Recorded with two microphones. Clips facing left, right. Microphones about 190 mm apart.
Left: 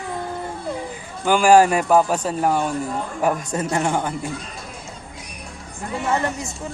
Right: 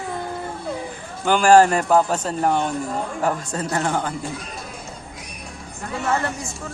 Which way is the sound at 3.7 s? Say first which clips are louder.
Left 1 dB; 10° left (ahead or behind).